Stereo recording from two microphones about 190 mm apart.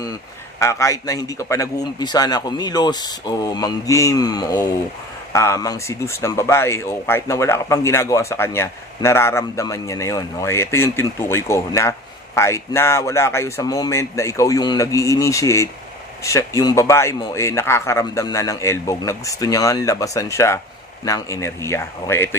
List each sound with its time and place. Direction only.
0.6 s a man's voice: 15° left (ahead or behind)